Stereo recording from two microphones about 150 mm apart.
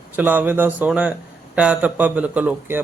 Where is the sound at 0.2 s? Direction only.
10° right (ahead or behind).